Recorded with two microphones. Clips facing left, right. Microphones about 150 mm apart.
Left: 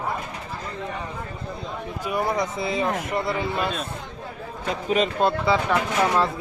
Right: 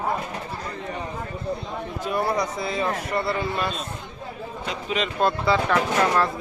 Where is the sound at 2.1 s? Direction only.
15° left (ahead or behind).